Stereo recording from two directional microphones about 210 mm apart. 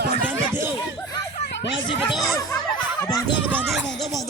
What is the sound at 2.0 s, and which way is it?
Speech, centre (ahead or behind).